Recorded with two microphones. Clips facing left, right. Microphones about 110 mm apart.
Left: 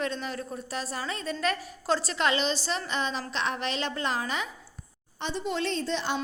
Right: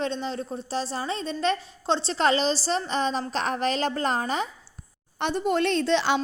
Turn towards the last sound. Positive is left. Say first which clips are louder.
# right 7 dB
turn(degrees=-85)